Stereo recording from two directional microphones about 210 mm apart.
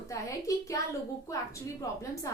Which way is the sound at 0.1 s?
15° left (ahead or behind).